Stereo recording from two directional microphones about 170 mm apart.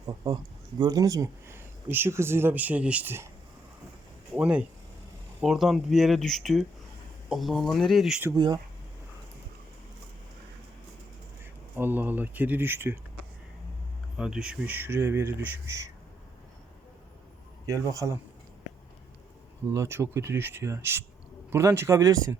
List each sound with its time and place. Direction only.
0.0 s speech: 20° right (ahead or behind)
4.4 s speech: 5° right (ahead or behind)
11.8 s speech: 10° right (ahead or behind)
14.2 s speech: 5° right (ahead or behind)
17.7 s a man's voice: 20° right (ahead or behind)
19.7 s speech: 15° right (ahead or behind)